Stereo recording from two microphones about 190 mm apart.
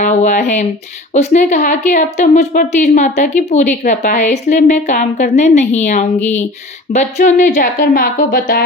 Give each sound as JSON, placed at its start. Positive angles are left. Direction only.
{"t": 0.0, "sound": "speech", "side_deg": 40}